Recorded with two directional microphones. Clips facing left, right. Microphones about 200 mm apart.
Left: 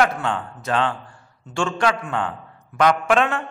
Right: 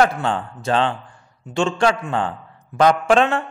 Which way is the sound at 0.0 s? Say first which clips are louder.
Right 2 dB; 30° right (ahead or behind).